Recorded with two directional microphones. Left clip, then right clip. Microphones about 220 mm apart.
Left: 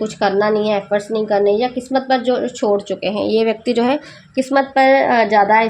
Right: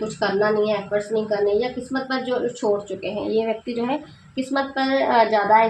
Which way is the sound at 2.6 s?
50° left (ahead or behind).